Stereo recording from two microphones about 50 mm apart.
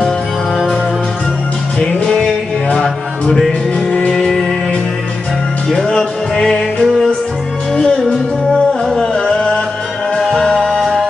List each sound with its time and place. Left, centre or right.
2.0 s music: centre
5.7 s music: centre
10.1 s music: centre